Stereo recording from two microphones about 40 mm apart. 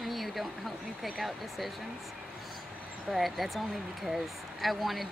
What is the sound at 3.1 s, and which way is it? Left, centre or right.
Speech, centre.